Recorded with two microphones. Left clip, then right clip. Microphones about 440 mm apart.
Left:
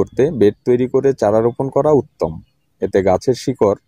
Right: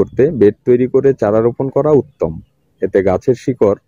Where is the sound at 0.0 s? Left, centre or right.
Left.